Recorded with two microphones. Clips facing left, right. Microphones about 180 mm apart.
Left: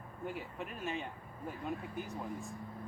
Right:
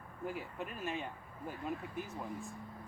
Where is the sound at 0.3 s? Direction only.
Centre (ahead or behind).